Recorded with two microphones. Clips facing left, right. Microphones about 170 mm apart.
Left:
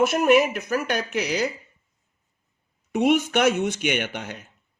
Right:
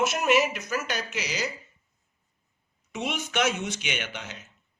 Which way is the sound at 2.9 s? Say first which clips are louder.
Left 11 dB; 55° left (ahead or behind).